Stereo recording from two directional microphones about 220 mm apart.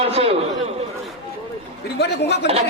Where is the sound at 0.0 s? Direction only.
25° right (ahead or behind).